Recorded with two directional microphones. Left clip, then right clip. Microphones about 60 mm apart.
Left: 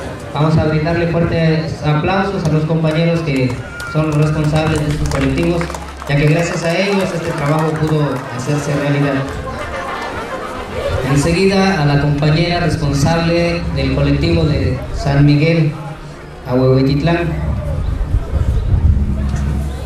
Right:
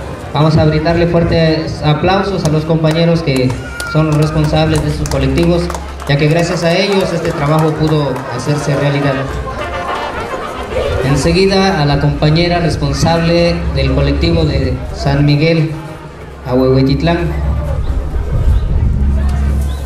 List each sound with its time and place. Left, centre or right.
0.3 s a man's voice: right
10.7 s chatter: right
11.1 s speech: centre